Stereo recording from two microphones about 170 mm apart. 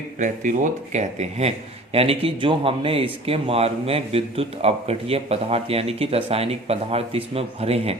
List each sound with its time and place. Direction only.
0.2 s speech: 50° right (ahead or behind)